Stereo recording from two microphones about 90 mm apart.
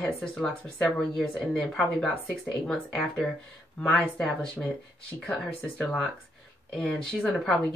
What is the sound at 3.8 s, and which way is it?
Speech, 5° left (ahead or behind).